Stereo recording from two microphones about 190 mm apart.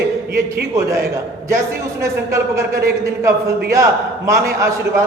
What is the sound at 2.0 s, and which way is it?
A man's voice, 15° right (ahead or behind).